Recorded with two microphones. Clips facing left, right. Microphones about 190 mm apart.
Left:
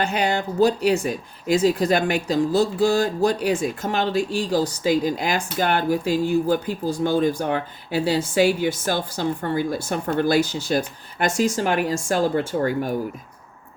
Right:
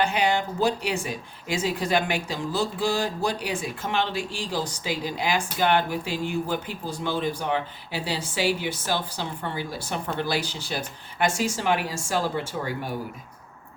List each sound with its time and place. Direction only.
0.0 s speech: 40° left (ahead or behind)